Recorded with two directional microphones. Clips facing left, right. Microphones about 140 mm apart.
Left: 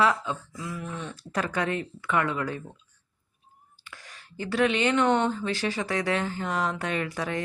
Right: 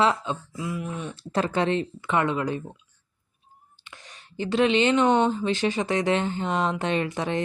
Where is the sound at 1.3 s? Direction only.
25° right (ahead or behind).